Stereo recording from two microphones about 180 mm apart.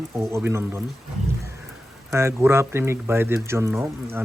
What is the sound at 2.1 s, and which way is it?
Speech, 15° right (ahead or behind).